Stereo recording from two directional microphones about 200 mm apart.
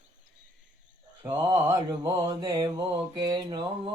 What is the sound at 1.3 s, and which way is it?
Mantra, 20° right (ahead or behind).